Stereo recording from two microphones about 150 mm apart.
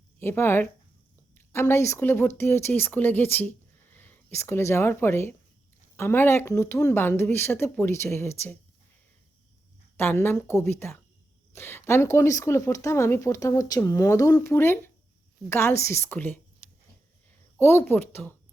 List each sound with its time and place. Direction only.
0.2 s speech: 15° left (ahead or behind)
10.0 s speech: 15° left (ahead or behind)
17.6 s speech: 15° left (ahead or behind)